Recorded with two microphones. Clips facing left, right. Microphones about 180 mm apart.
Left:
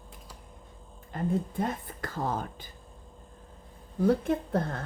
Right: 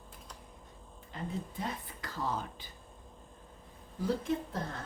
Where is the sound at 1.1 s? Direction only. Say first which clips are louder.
Left 9 dB; 50° left (ahead or behind).